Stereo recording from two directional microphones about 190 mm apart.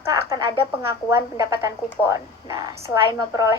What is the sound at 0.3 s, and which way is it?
A woman's voice, 15° right (ahead or behind).